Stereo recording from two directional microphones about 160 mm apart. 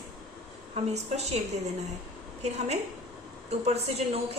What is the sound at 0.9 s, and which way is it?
Speech, 45° right (ahead or behind).